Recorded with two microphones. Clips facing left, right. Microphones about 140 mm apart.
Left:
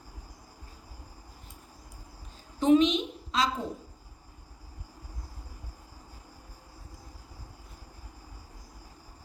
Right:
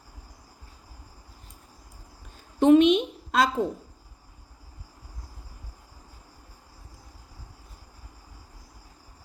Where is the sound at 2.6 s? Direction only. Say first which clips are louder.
Right 5 dB; 55° right (ahead or behind).